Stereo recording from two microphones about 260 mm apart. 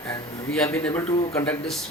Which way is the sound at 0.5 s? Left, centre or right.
Centre.